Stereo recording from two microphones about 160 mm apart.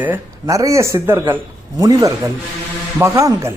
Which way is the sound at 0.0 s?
15° right (ahead or behind).